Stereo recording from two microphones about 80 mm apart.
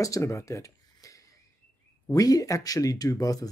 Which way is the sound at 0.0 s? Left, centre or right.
Left.